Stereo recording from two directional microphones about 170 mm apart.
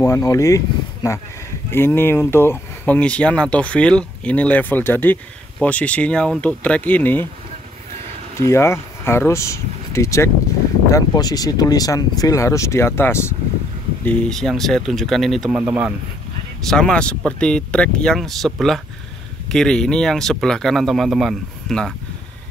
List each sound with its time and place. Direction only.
0.0 s speech: 20° left (ahead or behind)
1.7 s speech: 15° left (ahead or behind)
8.4 s speech: 15° left (ahead or behind)
15.6 s speech: 10° right (ahead or behind)
16.6 s speech: 5° left (ahead or behind)